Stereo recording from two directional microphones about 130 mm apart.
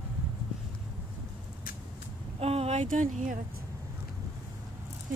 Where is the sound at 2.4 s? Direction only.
50° right (ahead or behind); by 3.3 s 80° right.